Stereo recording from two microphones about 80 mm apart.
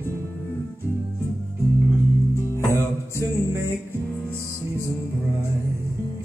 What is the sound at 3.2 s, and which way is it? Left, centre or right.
Music, right.